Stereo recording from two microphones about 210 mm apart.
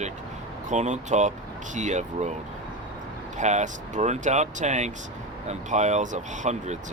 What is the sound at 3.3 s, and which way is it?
Speech, 35° right (ahead or behind).